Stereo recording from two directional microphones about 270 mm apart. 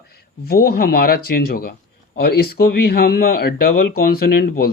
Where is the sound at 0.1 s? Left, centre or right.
Left.